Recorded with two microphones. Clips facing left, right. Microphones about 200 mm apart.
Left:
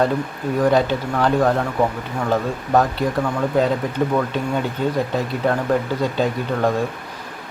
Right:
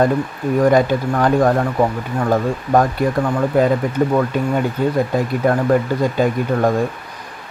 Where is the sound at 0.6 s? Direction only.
10° right (ahead or behind).